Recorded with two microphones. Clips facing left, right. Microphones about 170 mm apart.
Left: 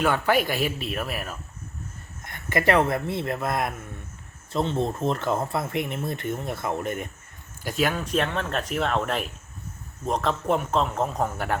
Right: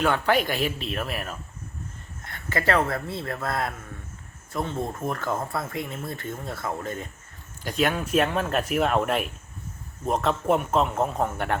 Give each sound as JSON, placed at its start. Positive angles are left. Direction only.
{"t": 0.0, "sound": "speech", "side_deg": 5}
{"t": 2.2, "sound": "speech", "side_deg": 15}
{"t": 7.6, "sound": "speech", "side_deg": 5}